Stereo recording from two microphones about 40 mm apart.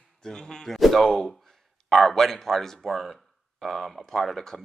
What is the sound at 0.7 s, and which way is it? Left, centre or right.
A man's voice, centre.